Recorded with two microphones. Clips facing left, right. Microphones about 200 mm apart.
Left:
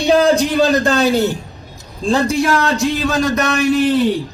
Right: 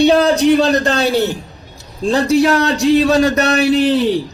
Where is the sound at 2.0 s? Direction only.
35° right (ahead or behind).